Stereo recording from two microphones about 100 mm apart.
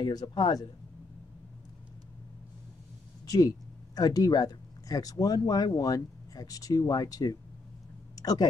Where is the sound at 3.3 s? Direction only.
40° left (ahead or behind).